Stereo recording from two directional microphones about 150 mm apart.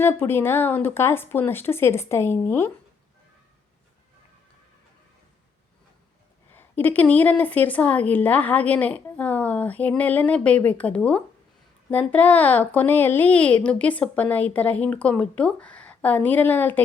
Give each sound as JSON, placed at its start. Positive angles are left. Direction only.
{"t": 0.0, "sound": "a woman's voice", "side_deg": 15}
{"t": 6.5, "sound": "a woman's voice", "side_deg": 15}